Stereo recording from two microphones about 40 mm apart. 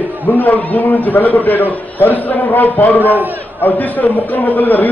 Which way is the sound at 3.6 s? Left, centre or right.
Left.